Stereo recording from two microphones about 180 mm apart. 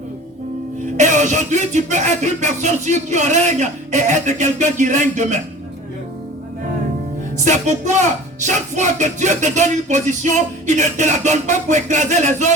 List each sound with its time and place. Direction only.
0.9 s music: 45° right (ahead or behind)
7.3 s music: 40° right (ahead or behind)